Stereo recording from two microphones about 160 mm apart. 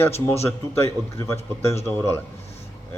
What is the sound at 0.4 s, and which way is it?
Speech, 15° left (ahead or behind).